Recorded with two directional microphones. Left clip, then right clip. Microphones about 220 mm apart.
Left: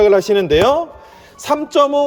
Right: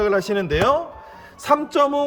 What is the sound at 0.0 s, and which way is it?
Speech, 10° left (ahead or behind).